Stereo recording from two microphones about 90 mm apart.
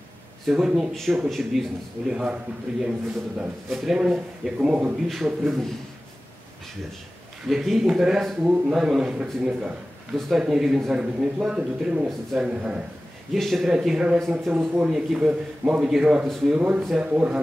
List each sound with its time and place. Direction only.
0.5 s speech: 5° right (ahead or behind)
3.3 s speech: centre (ahead or behind)
5.0 s speech: centre (ahead or behind)
7.4 s speech: centre (ahead or behind)
12.1 s speech: 5° left (ahead or behind)
12.4 s speech: 10° right (ahead or behind)
13.3 s speech: centre (ahead or behind)
14.5 s speech: 20° right (ahead or behind)
14.9 s speech: 5° right (ahead or behind)
16.5 s speech: 10° right (ahead or behind)